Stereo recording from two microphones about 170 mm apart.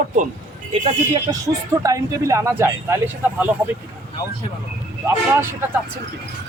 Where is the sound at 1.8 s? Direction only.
20° right (ahead or behind).